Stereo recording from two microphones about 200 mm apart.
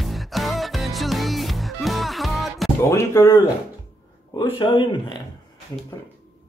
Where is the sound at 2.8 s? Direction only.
15° left (ahead or behind).